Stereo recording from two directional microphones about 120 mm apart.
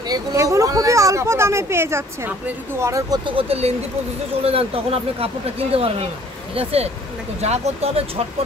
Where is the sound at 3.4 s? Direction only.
55° right (ahead or behind).